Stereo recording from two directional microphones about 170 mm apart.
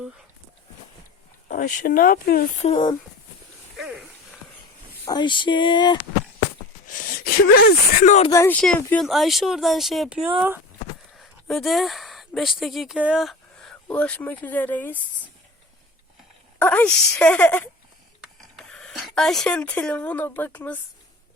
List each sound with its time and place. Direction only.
1.5 s speech: 50° left (ahead or behind)
2.6 s speech: 25° left (ahead or behind)
3.8 s dog: 5° right (ahead or behind)
5.0 s speech: 25° left (ahead or behind)
6.8 s speech: 55° left (ahead or behind)
8.3 s speech: 15° left (ahead or behind)
8.6 s speech: 5° left (ahead or behind)
16.6 s speech: 10° left (ahead or behind)